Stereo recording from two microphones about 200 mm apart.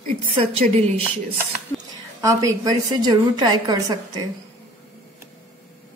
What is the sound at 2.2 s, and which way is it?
A woman's voice, 15° right (ahead or behind).